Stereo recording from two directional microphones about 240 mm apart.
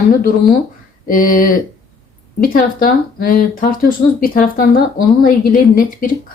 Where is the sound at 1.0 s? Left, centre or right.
Left.